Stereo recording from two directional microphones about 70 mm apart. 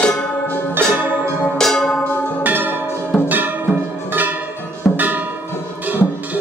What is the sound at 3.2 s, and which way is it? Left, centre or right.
Music, right.